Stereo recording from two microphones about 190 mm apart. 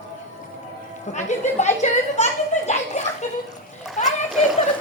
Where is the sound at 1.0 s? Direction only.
40° left (ahead or behind).